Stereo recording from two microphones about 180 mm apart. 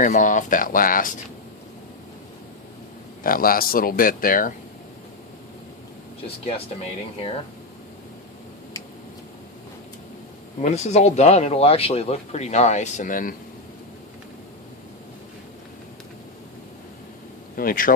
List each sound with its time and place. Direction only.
0.0 s speech: 45° left (ahead or behind)
3.2 s speech: 55° left (ahead or behind)
10.6 s speech: 40° left (ahead or behind)
17.6 s speech: 50° left (ahead or behind)